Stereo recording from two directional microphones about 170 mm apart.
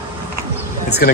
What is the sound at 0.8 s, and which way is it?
Speech, 70° left (ahead or behind).